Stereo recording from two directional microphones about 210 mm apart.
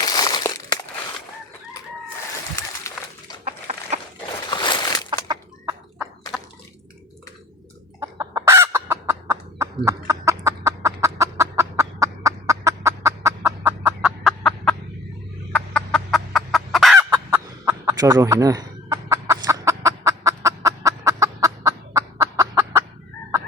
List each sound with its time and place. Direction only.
0.0 s crumpling: 20° left (ahead or behind)
3.4 s chicken: 30° right (ahead or behind)
4.5 s a sound: 20° left (ahead or behind)
5.3 s chicken: 15° right (ahead or behind)
8.0 s chicken: 15° right (ahead or behind)
14.0 s fowl: centre (ahead or behind)
15.5 s chicken: 5° left (ahead or behind)
17.1 s chicken: 15° right (ahead or behind)